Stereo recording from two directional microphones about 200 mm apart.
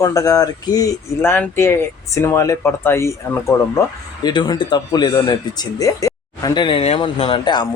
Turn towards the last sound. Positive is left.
turn(degrees=25)  # may be behind; listen again after turning